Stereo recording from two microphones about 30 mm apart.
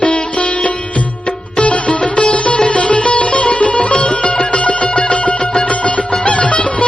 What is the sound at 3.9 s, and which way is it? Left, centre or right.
Music, left.